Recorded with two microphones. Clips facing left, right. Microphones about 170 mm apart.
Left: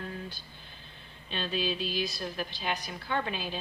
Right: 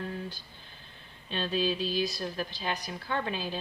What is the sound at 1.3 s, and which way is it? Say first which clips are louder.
Speech: right 3 dB; 40° right (ahead or behind).